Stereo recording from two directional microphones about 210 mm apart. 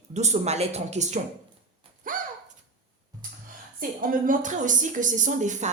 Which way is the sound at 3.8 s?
40° right (ahead or behind).